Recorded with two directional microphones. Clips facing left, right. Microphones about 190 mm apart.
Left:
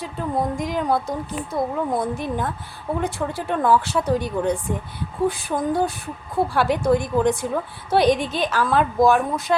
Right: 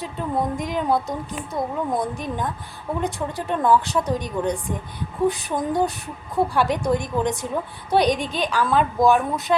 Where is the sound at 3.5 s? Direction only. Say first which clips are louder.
Even; 5° left (ahead or behind).